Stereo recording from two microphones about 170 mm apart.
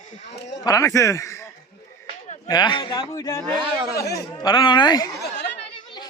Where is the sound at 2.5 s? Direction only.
25° left (ahead or behind).